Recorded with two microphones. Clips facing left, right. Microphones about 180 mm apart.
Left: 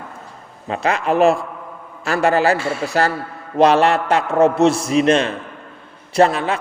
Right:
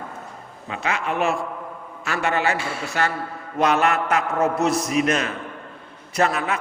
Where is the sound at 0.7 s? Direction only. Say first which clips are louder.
Left 7 dB; 35° left (ahead or behind).